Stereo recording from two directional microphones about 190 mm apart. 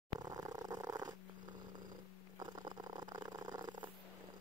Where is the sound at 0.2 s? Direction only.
20° right (ahead or behind).